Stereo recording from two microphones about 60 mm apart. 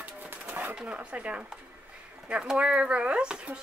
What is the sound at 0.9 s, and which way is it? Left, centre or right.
Speech, right.